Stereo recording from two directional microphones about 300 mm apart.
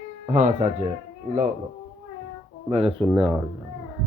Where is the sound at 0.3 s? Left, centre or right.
Right.